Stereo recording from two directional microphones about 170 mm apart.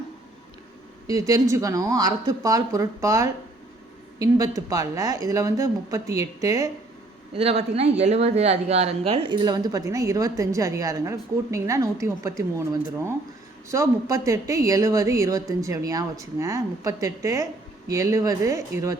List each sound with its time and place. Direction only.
1.0 s speech: 20° right (ahead or behind)
7.3 s speech: 35° right (ahead or behind); by 18.9 s 20° right (ahead or behind)